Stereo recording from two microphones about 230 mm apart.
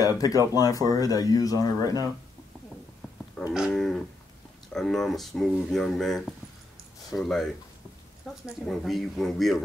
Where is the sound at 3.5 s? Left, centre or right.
Centre.